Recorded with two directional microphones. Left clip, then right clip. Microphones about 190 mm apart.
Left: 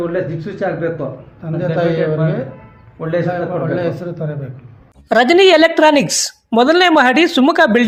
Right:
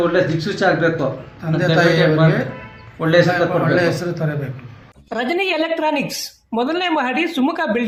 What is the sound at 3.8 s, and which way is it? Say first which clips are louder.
A woman's voice: right 2 dB; 40° left (ahead or behind).